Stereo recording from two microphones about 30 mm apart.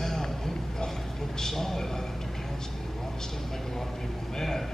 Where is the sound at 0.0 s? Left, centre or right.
Centre.